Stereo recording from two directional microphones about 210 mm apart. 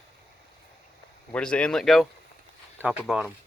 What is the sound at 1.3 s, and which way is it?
Speech, 5° left (ahead or behind).